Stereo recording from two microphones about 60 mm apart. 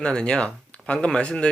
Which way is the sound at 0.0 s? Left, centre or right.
Centre.